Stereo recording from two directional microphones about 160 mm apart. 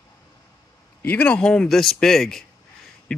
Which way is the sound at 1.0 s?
10° left (ahead or behind).